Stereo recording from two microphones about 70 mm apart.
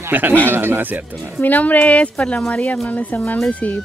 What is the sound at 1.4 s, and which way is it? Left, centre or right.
Speech, left.